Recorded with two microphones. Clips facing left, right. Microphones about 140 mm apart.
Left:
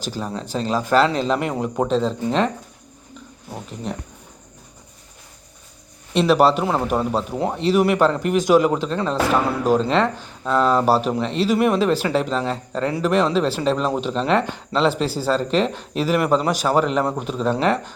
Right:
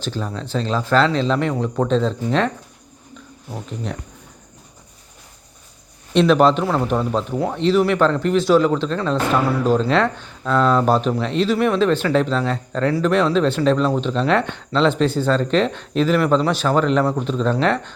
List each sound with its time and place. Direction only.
0.0 s speech: 10° left (ahead or behind)
3.9 s speech: centre (ahead or behind)
6.1 s speech: 5° left (ahead or behind)